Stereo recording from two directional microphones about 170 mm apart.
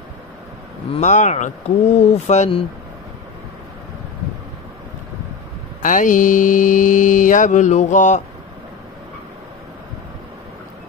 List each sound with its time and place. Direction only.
0.9 s speech: 45° left (ahead or behind)
5.8 s mantra: 50° left (ahead or behind)